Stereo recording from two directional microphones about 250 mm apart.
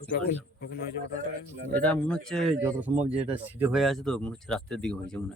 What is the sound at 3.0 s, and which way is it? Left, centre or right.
Speech, right.